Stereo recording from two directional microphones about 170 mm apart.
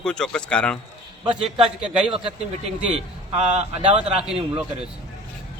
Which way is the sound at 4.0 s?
35° right (ahead or behind).